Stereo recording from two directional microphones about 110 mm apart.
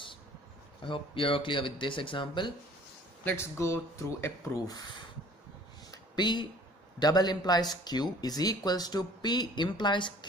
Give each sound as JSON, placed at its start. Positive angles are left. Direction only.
{"t": 0.8, "sound": "speech", "side_deg": 50}
{"t": 3.3, "sound": "speech", "side_deg": 25}
{"t": 5.9, "sound": "a sound", "side_deg": 40}
{"t": 7.0, "sound": "speech", "side_deg": 40}